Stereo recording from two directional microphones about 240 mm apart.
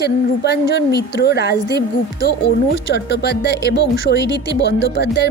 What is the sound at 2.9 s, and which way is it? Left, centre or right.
A woman's voice, left.